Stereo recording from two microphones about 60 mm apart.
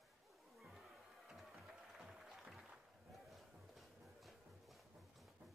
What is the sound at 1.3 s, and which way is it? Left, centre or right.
Music, centre.